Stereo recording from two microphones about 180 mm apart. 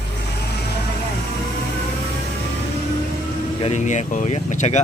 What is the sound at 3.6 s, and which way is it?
Speech, 40° left (ahead or behind).